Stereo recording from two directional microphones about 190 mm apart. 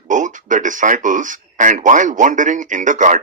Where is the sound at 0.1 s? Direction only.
40° right (ahead or behind).